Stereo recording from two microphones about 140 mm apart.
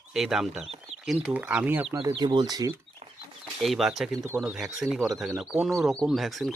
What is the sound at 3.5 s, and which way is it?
Speech, centre (ahead or behind).